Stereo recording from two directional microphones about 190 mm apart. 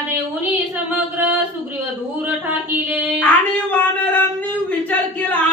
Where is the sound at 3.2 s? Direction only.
10° left (ahead or behind).